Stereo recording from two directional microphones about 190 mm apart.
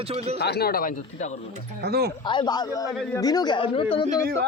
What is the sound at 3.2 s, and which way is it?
Speech, 20° left (ahead or behind).